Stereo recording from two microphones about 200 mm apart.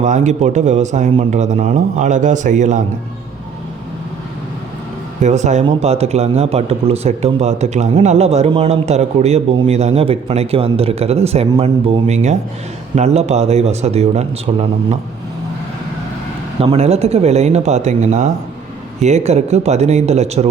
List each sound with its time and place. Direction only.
0.0 s speech: 35° right (ahead or behind)
5.2 s speech: 35° right (ahead or behind)
16.6 s speech: 30° right (ahead or behind)